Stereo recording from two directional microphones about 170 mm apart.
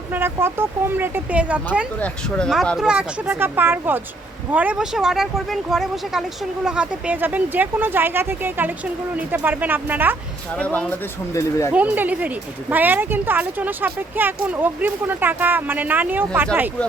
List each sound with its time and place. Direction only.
0.1 s speech: 15° right (ahead or behind)
10.6 s speech: 10° left (ahead or behind)
11.7 s speech: 10° right (ahead or behind)